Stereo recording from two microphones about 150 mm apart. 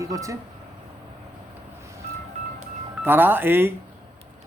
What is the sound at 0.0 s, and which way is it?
Speech, 20° right (ahead or behind).